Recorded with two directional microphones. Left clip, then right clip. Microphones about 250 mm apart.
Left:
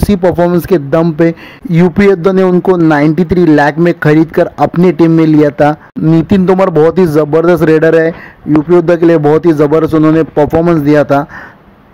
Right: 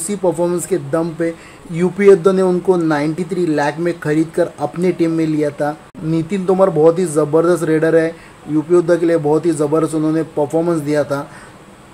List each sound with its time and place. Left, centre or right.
0.1 s speech: left